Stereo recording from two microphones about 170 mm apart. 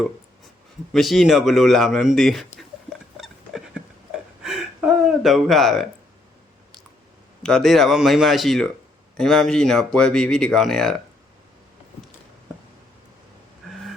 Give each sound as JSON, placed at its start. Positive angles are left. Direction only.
{"t": 0.9, "sound": "speech", "side_deg": 0}
{"t": 2.6, "sound": "a sound", "side_deg": 0}
{"t": 7.4, "sound": "speech", "side_deg": 0}